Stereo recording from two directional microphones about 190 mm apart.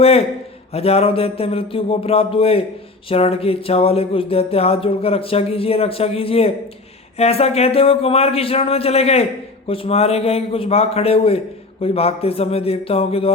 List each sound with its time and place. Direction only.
0.0 s speech: 30° left (ahead or behind)